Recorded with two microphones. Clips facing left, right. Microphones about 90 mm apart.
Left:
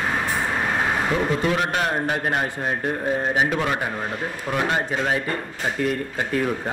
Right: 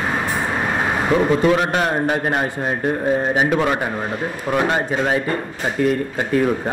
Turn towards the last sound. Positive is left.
turn(degrees=-25)  # may be behind; listen again after turning